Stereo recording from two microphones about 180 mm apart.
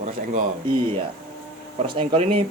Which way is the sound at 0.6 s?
25° right (ahead or behind).